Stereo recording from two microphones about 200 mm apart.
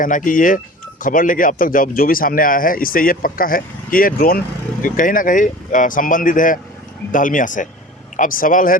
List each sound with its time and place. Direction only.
0.0 s speech: 40° left (ahead or behind)